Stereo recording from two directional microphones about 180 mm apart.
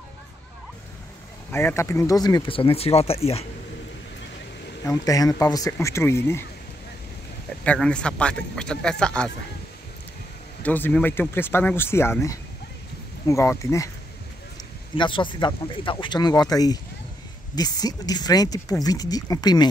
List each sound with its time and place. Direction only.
1.5 s speech: 15° left (ahead or behind); by 3.4 s 35° left (ahead or behind)
4.8 s speech: 20° left (ahead or behind)
7.6 s speech: 5° left (ahead or behind)
10.6 s speech: 10° left (ahead or behind)
15.0 s speech: 25° left (ahead or behind)